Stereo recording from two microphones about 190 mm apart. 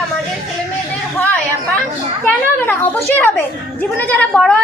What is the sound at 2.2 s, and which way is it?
A woman's voice, 10° left (ahead or behind).